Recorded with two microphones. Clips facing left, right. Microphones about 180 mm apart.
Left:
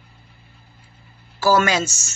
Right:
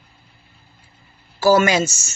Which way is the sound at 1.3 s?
15° right (ahead or behind).